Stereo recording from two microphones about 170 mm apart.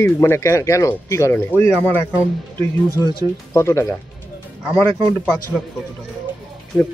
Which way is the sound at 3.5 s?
15° left (ahead or behind).